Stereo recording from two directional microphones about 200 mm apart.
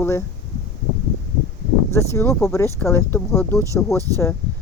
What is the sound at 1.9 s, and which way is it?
Speech, 15° left (ahead or behind).